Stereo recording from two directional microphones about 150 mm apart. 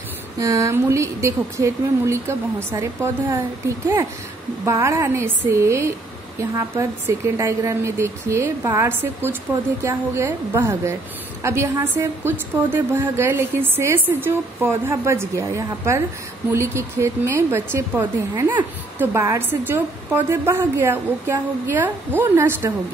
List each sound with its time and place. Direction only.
0.4 s a woman's voice: 20° right (ahead or behind)